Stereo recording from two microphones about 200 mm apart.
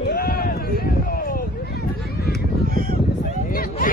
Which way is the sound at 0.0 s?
50° left (ahead or behind).